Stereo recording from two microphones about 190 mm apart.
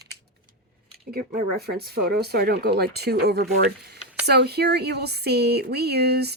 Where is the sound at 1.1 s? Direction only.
55° right (ahead or behind).